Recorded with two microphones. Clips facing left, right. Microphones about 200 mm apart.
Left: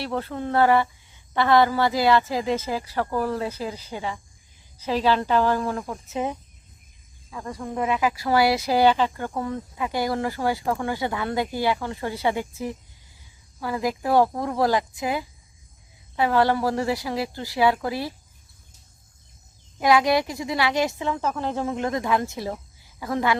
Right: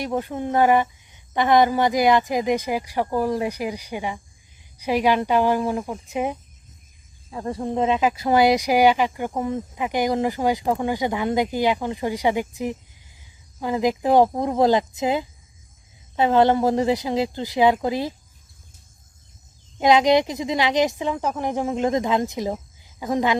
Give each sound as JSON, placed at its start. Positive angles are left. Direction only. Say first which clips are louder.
{"t": 0.0, "sound": "speech", "louder": "right 3 dB", "side_deg": -15}
{"t": 7.3, "sound": "a woman's voice", "louder": "right 6 dB", "side_deg": -30}
{"t": 19.8, "sound": "a woman's voice", "louder": "right 3 dB", "side_deg": -20}